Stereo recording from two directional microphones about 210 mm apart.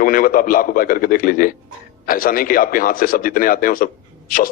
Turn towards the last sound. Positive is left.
turn(degrees=40)  # may be behind; listen again after turning